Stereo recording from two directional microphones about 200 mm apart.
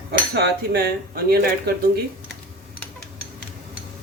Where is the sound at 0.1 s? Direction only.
50° right (ahead or behind).